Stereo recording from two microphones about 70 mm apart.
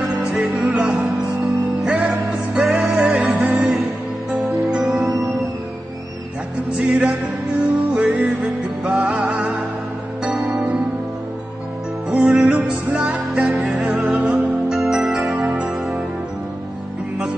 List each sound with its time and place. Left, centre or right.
0.2 s music: centre
6.8 s music: centre
12.1 s music: centre
14.8 s music: centre